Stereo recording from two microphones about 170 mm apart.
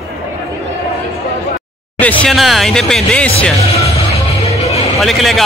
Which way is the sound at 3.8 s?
40° left (ahead or behind).